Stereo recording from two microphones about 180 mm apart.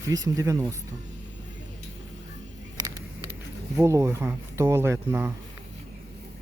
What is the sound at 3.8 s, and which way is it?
Speech, 15° right (ahead or behind).